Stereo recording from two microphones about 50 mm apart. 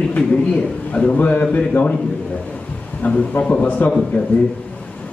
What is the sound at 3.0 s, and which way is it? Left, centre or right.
Speech, left.